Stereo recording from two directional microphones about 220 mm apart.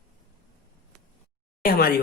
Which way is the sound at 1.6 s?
45° left (ahead or behind).